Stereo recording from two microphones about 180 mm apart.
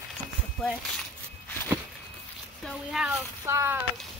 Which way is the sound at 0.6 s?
5° left (ahead or behind).